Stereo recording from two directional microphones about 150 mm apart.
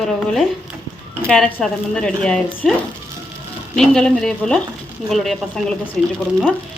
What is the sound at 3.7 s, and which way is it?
Speech, 5° left (ahead or behind).